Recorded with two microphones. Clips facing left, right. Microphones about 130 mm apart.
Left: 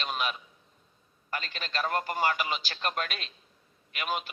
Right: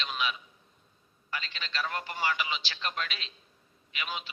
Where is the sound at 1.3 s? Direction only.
45° left (ahead or behind).